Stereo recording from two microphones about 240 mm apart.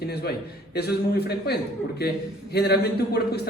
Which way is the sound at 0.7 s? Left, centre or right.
Left.